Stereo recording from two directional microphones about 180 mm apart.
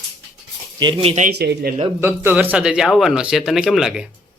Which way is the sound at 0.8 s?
25° right (ahead or behind).